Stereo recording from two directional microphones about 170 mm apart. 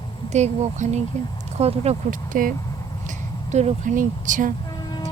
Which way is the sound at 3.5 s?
45° right (ahead or behind).